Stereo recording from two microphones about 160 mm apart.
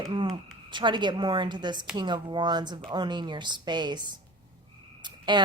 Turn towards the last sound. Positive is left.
turn(degrees=-30)  # may be behind; listen again after turning